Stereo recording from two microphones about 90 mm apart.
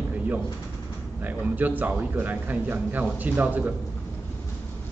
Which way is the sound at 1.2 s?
20° right (ahead or behind).